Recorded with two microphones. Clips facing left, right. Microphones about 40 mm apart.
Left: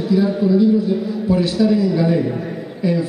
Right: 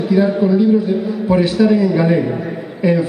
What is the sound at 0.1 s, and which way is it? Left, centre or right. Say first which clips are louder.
Speech: right 2 dB; right.